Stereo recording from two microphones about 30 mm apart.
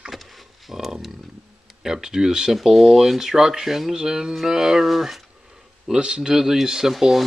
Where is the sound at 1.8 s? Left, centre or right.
Centre.